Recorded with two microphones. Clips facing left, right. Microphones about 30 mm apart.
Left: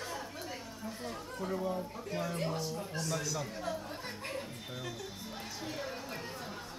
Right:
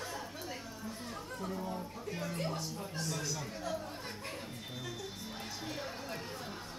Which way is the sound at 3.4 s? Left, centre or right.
Centre.